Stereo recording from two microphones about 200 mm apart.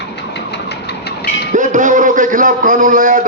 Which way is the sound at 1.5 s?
40° right (ahead or behind).